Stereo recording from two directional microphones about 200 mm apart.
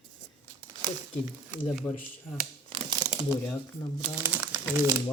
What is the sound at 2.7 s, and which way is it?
Crumpling, 20° right (ahead or behind).